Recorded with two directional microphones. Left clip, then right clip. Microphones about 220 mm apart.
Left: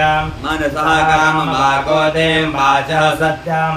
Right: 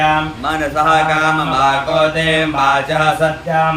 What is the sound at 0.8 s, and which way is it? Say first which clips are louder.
Mantra: left 1 dB; 15° right (ahead or behind).